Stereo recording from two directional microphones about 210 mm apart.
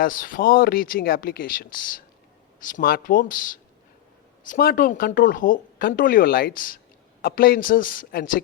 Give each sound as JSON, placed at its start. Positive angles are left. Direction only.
{"t": 0.0, "sound": "speech", "side_deg": 40}